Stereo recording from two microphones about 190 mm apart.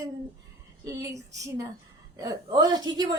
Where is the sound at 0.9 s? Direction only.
15° right (ahead or behind).